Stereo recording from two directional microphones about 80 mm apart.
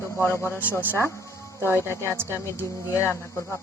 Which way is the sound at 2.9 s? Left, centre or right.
Left.